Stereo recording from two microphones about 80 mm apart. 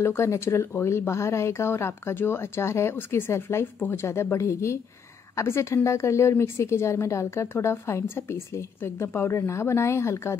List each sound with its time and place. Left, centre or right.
0.0 s a woman's voice: left